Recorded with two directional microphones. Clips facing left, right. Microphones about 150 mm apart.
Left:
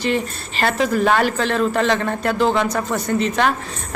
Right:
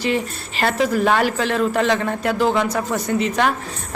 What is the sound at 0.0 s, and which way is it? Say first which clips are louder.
A woman's voice: even; 10° right (ahead or behind).